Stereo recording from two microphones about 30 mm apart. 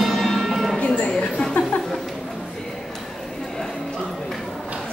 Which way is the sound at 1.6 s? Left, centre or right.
Left.